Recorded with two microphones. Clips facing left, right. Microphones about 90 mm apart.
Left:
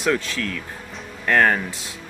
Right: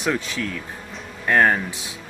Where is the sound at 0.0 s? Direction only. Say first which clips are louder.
Left 2 dB; 15° right (ahead or behind).